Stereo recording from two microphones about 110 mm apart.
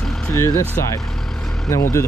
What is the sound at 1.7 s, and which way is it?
Speech, 25° left (ahead or behind).